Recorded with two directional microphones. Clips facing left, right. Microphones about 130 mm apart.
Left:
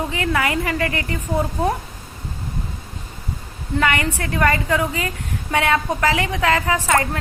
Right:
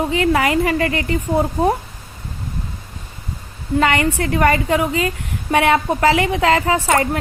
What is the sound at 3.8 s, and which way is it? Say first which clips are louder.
A woman's voice: right 4 dB; 25° right (ahead or behind).